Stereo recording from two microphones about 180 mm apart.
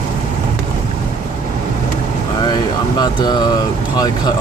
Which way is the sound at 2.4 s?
25° left (ahead or behind).